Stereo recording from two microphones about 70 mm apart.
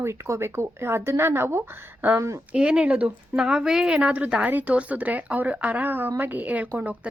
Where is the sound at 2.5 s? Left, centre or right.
Centre.